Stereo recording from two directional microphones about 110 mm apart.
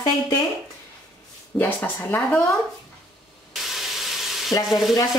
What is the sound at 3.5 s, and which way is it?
Sizzle, centre (ahead or behind).